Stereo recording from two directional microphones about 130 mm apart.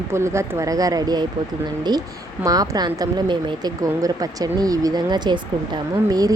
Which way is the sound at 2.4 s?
25° right (ahead or behind).